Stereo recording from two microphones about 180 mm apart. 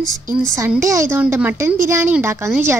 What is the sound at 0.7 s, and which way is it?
A woman's voice, 15° right (ahead or behind).